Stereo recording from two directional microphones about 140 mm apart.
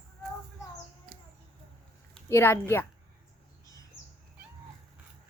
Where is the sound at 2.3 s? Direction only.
15° left (ahead or behind).